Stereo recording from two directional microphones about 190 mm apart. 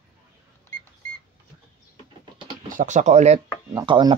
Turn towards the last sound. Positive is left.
turn(degrees=-25)  # may be behind; listen again after turning